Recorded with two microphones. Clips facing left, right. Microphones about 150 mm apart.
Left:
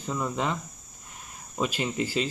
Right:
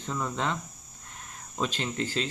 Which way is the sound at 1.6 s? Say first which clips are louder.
Left 3 dB; 10° left (ahead or behind).